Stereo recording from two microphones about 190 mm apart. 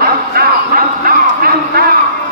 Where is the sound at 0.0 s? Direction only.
55° right (ahead or behind).